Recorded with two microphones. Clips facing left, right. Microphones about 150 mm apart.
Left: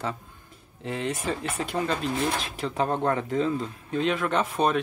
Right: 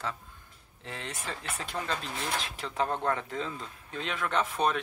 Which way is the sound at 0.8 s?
15° left (ahead or behind).